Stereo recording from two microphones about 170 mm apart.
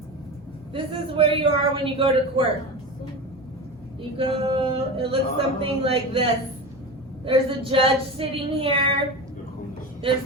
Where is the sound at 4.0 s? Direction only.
30° right (ahead or behind).